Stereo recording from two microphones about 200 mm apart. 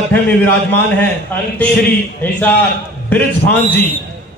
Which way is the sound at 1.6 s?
10° left (ahead or behind).